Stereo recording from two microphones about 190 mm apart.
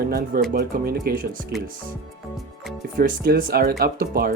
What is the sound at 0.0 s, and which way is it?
A man's voice, 55° right (ahead or behind).